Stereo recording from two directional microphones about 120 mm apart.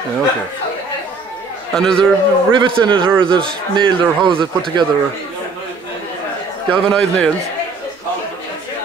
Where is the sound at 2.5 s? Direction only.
45° right (ahead or behind).